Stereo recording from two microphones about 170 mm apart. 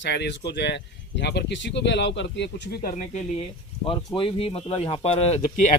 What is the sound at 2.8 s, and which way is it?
Speech, 50° left (ahead or behind).